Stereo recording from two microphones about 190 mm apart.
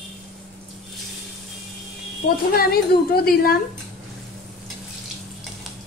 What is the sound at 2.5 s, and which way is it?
Speech, 50° left (ahead or behind).